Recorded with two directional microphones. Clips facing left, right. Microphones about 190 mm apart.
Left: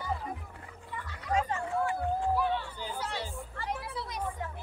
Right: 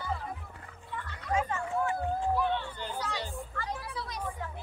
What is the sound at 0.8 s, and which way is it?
Music, 10° left (ahead or behind).